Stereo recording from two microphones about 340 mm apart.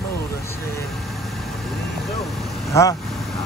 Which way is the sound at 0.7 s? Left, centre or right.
Centre.